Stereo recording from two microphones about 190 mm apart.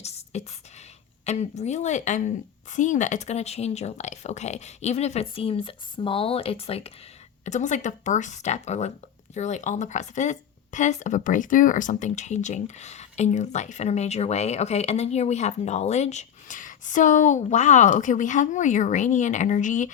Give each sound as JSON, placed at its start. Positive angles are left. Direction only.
{"t": 0.3, "sound": "a woman's voice", "side_deg": 35}